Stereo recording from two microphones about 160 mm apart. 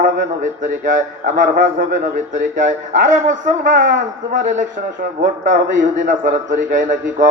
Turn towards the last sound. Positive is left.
turn(degrees=-50)  # may be behind; listen again after turning